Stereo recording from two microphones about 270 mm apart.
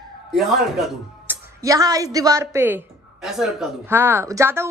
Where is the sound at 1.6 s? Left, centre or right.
Centre.